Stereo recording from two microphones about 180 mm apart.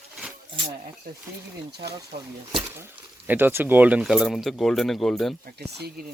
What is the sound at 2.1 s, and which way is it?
Speech, 35° right (ahead or behind).